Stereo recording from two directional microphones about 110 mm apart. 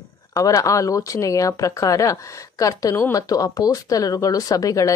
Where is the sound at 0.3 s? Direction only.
30° left (ahead or behind).